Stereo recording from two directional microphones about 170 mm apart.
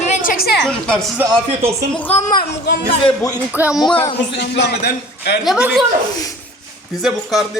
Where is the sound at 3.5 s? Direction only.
10° right (ahead or behind).